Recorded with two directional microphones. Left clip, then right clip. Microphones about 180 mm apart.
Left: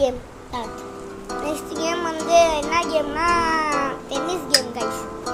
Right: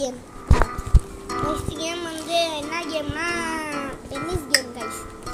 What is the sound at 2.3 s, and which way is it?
A child's voice, centre (ahead or behind).